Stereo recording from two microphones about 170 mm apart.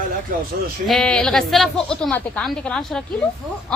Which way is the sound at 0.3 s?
55° right (ahead or behind).